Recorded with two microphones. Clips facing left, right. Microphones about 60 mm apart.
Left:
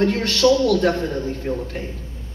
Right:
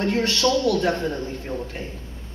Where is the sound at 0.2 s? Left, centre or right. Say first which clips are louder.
Left 4 dB; left.